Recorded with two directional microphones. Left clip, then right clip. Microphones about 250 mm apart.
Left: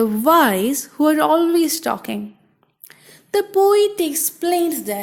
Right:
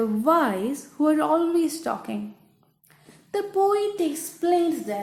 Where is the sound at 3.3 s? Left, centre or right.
Left.